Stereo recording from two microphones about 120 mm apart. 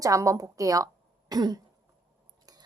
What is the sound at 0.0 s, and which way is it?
A woman's voice, 25° right (ahead or behind).